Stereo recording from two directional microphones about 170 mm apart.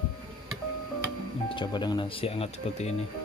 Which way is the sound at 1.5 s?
30° left (ahead or behind).